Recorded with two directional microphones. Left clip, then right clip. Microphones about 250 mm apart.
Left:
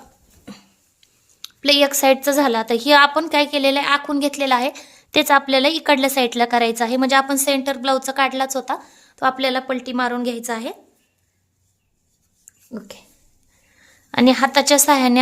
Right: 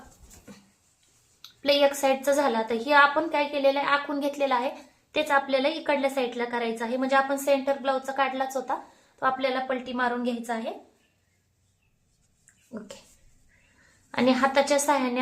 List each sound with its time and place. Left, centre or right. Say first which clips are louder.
1.4 s a woman's voice: left 6 dB; left
12.7 s speech: left 6 dB; left
14.1 s a woman's voice: left 7 dB; left